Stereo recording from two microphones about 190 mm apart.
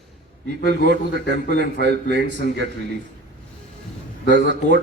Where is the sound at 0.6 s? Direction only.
65° right (ahead or behind).